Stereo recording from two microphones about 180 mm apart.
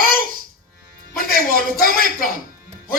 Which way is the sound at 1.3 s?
55° left (ahead or behind).